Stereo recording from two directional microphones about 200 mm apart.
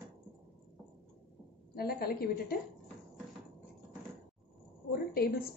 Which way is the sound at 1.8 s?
50° left (ahead or behind).